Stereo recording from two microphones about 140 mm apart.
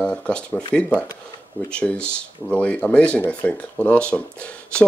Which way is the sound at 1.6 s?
5° left (ahead or behind).